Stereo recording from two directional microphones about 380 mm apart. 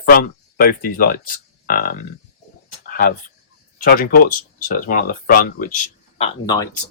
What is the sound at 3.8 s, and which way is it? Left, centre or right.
Speech, left.